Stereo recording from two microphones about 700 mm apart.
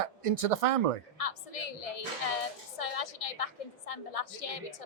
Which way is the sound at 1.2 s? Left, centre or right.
Left.